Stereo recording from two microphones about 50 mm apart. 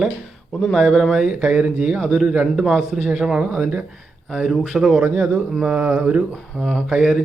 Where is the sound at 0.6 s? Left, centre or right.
Centre.